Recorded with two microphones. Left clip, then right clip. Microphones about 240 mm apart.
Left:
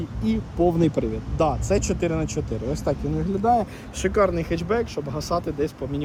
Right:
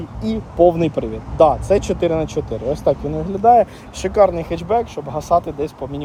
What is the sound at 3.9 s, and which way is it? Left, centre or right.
Speech, centre.